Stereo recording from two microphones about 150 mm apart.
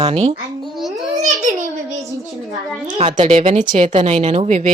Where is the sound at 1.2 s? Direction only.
60° right (ahead or behind).